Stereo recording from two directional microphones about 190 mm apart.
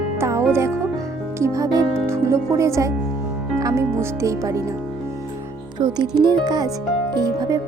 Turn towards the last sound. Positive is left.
turn(degrees=-20)  # may be behind; listen again after turning